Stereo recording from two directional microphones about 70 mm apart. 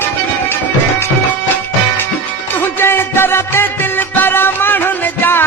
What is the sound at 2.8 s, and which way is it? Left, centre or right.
Music, left.